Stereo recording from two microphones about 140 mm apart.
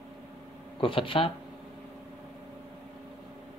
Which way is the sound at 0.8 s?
40° left (ahead or behind).